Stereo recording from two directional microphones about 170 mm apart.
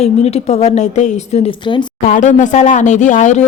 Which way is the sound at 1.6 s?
25° left (ahead or behind).